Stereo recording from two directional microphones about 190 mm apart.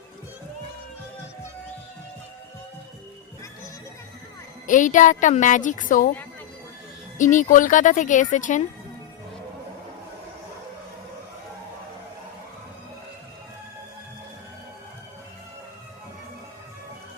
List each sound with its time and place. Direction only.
4.6 s speech: 40° left (ahead or behind)
7.2 s speech: 40° left (ahead or behind)